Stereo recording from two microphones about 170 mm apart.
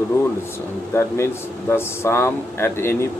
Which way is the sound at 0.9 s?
15° left (ahead or behind).